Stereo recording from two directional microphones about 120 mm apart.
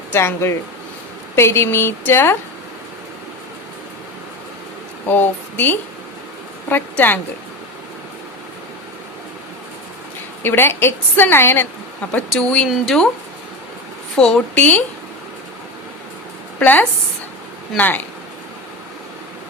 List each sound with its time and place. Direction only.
0.1 s a woman's voice: 20° left (ahead or behind)
5.0 s speech: 15° left (ahead or behind)
10.4 s a woman's voice: 20° left (ahead or behind)
12.3 s speech: 10° left (ahead or behind)
14.2 s speech: 5° left (ahead or behind)
16.6 s a woman's voice: 15° left (ahead or behind)